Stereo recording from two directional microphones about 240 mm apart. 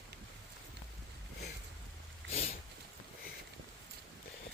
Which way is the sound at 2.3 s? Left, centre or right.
Left.